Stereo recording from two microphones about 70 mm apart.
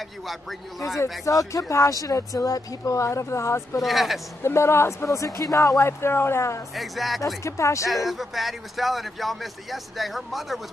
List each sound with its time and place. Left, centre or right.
0.3 s speech: centre
1.2 s speech: left
3.8 s speech: centre
4.4 s speech: left
6.7 s speech: centre
7.4 s speech: left
8.1 s speech: centre